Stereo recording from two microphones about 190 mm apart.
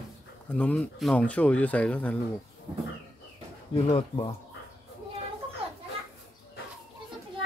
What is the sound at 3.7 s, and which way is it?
Speech, 30° left (ahead or behind).